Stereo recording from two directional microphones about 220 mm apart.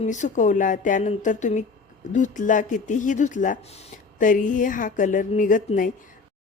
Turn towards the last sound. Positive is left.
turn(degrees=35)  # may be behind; listen again after turning